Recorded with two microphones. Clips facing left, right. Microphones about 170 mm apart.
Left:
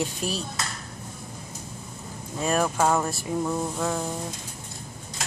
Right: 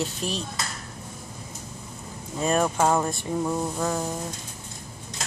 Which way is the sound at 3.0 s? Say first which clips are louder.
Right 1 dB; centre (ahead or behind).